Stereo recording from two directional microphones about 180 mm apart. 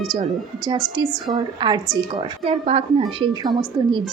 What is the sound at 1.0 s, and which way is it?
Speech, 20° right (ahead or behind).